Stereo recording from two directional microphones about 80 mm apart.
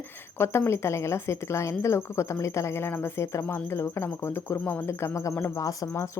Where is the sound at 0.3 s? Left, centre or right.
Left.